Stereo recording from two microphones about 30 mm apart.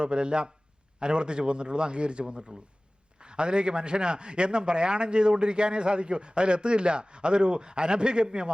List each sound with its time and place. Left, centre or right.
0.0 s a man's voice: right